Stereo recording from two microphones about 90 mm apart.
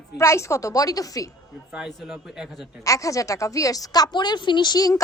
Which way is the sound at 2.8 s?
35° left (ahead or behind).